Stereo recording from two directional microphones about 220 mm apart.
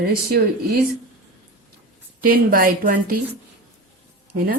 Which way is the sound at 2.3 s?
40° right (ahead or behind).